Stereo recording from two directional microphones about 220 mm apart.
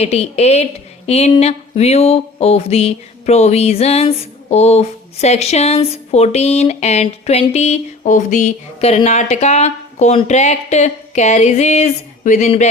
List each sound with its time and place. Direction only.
0.0 s speech: 30° left (ahead or behind)